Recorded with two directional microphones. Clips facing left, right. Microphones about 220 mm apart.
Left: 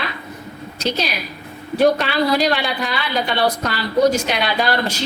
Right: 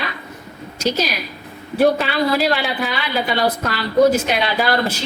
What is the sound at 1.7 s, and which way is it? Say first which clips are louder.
Speech: even; 5° right (ahead or behind).